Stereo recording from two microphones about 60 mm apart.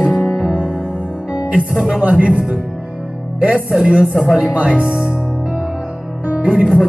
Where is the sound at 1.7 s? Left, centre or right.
Centre.